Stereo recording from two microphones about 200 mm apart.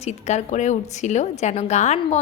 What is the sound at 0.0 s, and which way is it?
A woman's voice, 35° left (ahead or behind).